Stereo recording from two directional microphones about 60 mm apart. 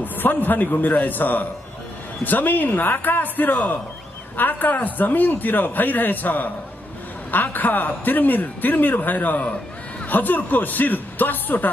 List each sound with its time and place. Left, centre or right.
0.0 s a man's voice: left